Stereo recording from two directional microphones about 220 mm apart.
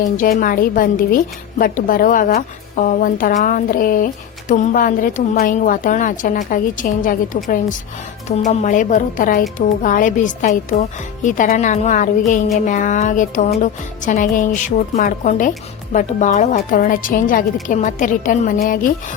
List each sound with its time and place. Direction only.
0.0 s speech: 35° left (ahead or behind)